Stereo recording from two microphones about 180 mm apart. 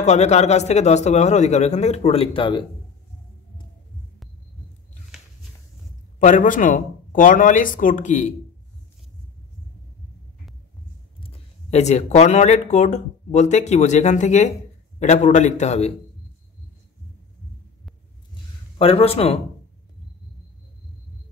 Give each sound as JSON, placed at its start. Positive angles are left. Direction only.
{"t": 0.0, "sound": "speech", "side_deg": 40}
{"t": 6.1, "sound": "a man's voice", "side_deg": 45}
{"t": 11.1, "sound": "speech", "side_deg": 35}
{"t": 18.8, "sound": "speech", "side_deg": 30}